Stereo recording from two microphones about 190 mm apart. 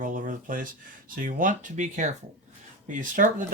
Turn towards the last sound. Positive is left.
turn(degrees=-45)  # may be behind; listen again after turning